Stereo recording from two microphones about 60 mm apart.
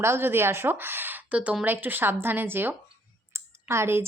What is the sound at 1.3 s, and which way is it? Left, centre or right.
Speech, right.